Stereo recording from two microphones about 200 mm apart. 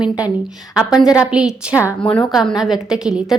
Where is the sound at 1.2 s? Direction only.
5° right (ahead or behind).